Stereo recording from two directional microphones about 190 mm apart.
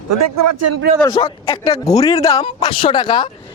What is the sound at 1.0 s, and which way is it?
Speech, 30° left (ahead or behind).